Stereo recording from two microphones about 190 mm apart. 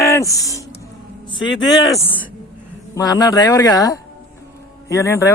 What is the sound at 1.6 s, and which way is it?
Speech, 20° left (ahead or behind).